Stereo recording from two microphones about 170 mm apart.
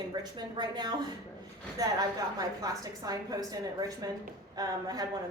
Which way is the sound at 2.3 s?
20° right (ahead or behind).